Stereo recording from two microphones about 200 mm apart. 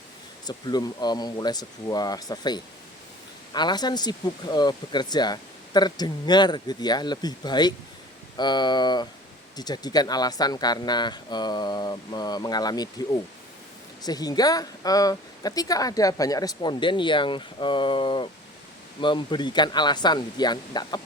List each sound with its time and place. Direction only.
0.4 s speech: 20° left (ahead or behind)
14.0 s speech: 20° left (ahead or behind)